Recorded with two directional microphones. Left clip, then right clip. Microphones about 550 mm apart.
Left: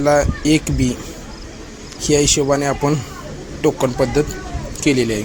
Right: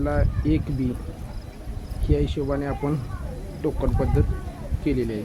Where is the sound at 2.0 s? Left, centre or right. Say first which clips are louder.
Left 11 dB; right.